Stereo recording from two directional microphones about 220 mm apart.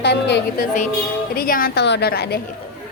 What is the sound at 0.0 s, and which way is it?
A woman's voice, 50° left (ahead or behind).